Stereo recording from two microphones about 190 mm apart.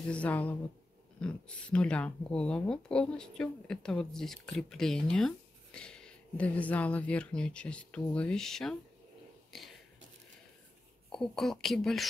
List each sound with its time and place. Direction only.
0.1 s speech: 10° left (ahead or behind)
11.1 s speech: centre (ahead or behind)